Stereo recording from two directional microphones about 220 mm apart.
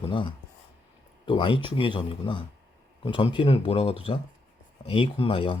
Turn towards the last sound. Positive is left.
turn(degrees=25)  # may be behind; listen again after turning